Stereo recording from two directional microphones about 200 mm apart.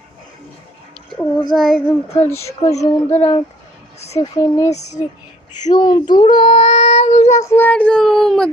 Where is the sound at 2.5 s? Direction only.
30° left (ahead or behind).